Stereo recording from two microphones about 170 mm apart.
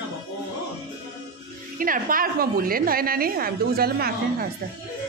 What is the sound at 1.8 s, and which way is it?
A woman's voice, 55° right (ahead or behind).